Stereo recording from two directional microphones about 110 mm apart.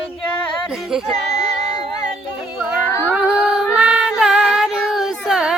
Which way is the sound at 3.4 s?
5° right (ahead or behind).